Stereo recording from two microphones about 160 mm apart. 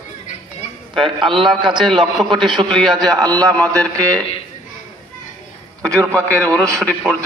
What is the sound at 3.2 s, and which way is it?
Speech, 20° right (ahead or behind).